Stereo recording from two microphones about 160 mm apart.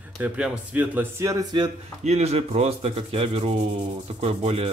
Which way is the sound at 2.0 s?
45° right (ahead or behind).